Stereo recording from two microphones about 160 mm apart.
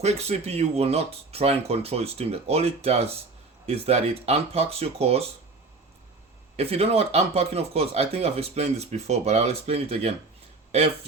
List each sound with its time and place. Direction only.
0.0 s speech: 45° right (ahead or behind)
6.6 s speech: 40° right (ahead or behind)